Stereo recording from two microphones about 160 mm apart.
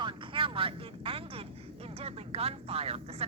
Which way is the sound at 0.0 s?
35° right (ahead or behind).